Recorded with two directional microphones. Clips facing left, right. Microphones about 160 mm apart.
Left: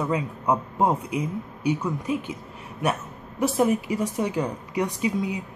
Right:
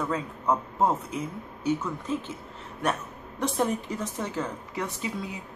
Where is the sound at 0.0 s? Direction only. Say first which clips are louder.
Left 3 dB; 15° left (ahead or behind).